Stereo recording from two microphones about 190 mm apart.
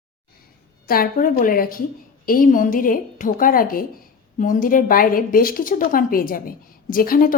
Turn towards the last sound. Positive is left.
turn(degrees=50)  # may be behind; listen again after turning